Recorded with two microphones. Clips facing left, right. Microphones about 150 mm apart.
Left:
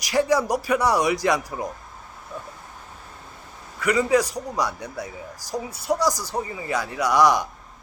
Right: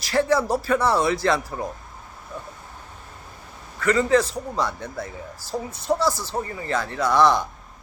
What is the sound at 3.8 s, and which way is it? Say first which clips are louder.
Speech: right 1 dB; 10° left (ahead or behind).